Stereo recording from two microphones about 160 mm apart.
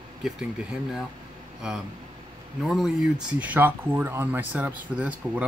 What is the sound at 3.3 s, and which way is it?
Speech, 10° right (ahead or behind).